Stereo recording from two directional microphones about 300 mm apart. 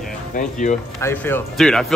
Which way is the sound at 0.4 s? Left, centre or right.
Left.